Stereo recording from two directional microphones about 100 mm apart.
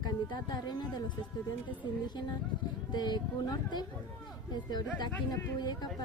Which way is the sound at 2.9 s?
45° left (ahead or behind).